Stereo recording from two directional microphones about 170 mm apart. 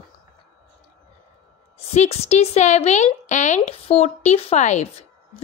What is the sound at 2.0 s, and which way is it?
Speech, 40° left (ahead or behind).